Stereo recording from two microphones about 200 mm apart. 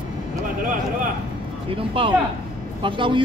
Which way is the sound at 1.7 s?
25° right (ahead or behind).